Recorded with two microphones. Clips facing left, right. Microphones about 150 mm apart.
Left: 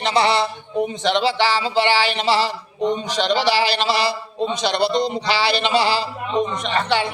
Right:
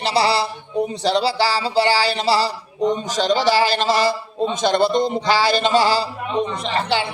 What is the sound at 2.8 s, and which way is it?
A man's voice, 45° right (ahead or behind).